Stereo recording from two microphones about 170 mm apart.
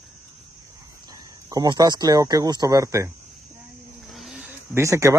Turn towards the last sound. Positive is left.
turn(degrees=-20)  # may be behind; listen again after turning